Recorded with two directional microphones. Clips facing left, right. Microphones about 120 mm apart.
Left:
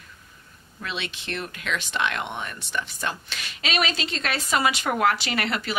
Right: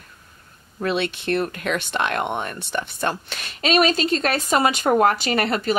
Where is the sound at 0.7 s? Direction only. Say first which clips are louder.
Right 10 dB; 50° right (ahead or behind).